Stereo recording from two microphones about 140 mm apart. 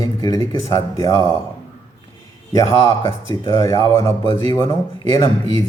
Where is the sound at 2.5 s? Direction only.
20° left (ahead or behind).